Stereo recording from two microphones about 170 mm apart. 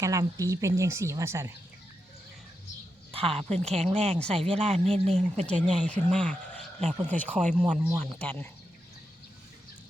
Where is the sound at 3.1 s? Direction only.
35° right (ahead or behind).